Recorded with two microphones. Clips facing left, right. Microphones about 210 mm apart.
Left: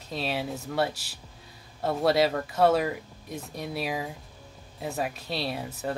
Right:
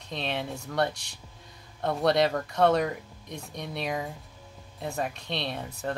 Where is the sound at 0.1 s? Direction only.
5° left (ahead or behind).